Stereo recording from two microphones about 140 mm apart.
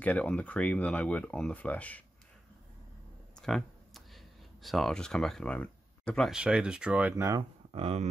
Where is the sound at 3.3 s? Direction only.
5° left (ahead or behind).